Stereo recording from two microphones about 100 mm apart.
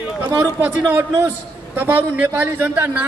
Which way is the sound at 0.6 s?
20° right (ahead or behind).